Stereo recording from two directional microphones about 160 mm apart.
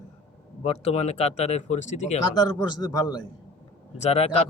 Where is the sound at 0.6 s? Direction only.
40° left (ahead or behind).